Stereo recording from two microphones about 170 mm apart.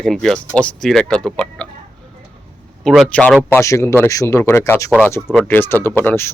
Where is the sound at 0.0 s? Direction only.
5° left (ahead or behind).